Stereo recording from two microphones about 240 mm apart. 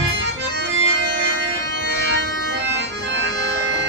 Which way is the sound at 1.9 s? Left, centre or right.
Right.